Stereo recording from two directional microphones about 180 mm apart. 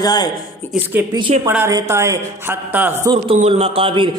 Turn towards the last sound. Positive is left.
turn(degrees=-30)  # may be behind; listen again after turning